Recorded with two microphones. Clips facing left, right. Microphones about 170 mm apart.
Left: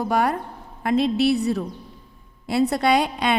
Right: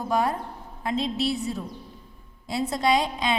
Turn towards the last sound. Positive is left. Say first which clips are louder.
# left 3 dB
turn(degrees=65)  # may be behind; listen again after turning